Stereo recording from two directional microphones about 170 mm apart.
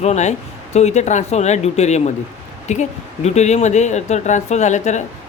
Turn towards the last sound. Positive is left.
turn(degrees=45)  # may be behind; listen again after turning